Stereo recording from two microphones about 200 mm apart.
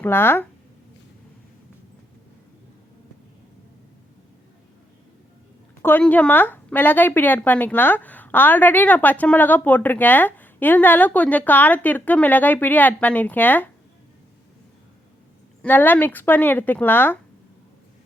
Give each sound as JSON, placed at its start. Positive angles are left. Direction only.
{"t": 0.0, "sound": "speech", "side_deg": 10}
{"t": 5.8, "sound": "speech", "side_deg": 10}
{"t": 15.6, "sound": "speech", "side_deg": 10}